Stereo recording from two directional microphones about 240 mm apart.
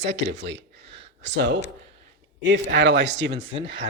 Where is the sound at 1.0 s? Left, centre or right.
Right.